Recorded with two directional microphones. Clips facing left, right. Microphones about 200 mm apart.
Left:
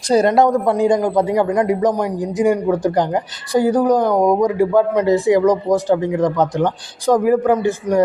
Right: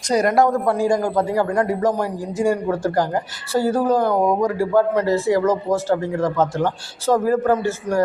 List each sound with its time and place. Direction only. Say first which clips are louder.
0.1 s a man's voice: left 3 dB; 25° left (ahead or behind)